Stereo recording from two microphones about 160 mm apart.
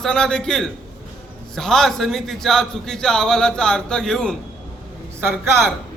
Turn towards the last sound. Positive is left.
turn(degrees=-15)  # may be behind; listen again after turning